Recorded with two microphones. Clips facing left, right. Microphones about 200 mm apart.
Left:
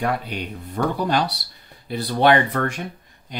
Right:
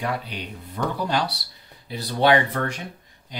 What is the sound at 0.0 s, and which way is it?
Speech, 50° left (ahead or behind).